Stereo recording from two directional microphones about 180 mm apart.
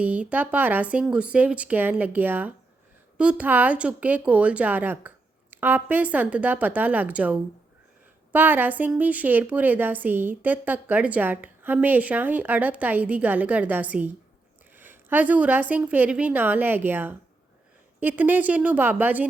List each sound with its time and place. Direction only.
0.0 s a woman's voice: 5° right (ahead or behind)